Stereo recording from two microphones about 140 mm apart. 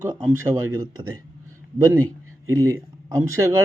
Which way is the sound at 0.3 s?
20° right (ahead or behind).